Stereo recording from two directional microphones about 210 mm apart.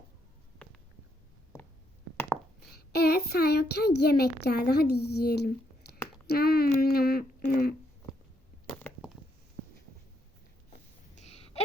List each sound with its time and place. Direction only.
2.6 s speech: 50° left (ahead or behind)
8.6 s chop: 5° left (ahead or behind)
11.2 s a sound: 30° left (ahead or behind)